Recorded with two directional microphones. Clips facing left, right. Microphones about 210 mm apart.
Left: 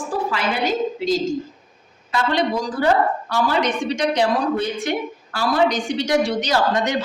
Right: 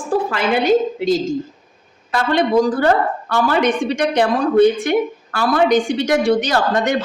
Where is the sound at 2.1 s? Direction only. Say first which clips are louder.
Right 5 dB; 55° right (ahead or behind).